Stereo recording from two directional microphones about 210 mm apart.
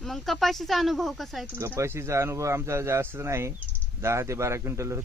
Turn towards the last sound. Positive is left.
turn(degrees=-15)  # may be behind; listen again after turning